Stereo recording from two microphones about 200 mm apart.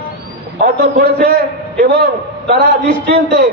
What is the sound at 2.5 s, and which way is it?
Speech, 55° right (ahead or behind).